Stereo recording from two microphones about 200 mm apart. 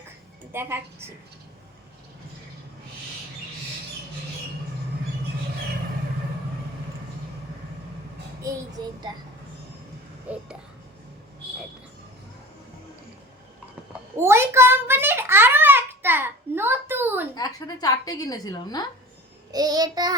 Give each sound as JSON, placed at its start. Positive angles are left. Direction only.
{"t": 0.5, "sound": "a woman's voice", "side_deg": -10}
{"t": 8.8, "sound": "child singing", "side_deg": -20}
{"t": 10.2, "sound": "a woman's voice", "side_deg": -5}
{"t": 14.2, "sound": "a sound", "side_deg": -10}
{"t": 17.3, "sound": "a woman's voice", "side_deg": 20}
{"t": 19.5, "sound": "child singing", "side_deg": -20}